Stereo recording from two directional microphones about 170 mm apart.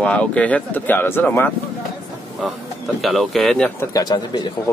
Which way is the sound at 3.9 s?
25° left (ahead or behind).